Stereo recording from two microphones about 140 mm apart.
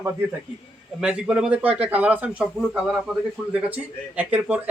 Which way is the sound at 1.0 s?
5° right (ahead or behind).